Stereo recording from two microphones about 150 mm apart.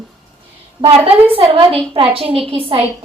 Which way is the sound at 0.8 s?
40° right (ahead or behind).